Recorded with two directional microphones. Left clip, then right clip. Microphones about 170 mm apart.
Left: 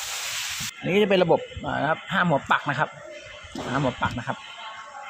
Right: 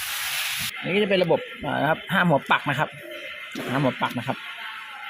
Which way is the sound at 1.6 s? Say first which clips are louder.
Right 3 dB; 10° right (ahead or behind).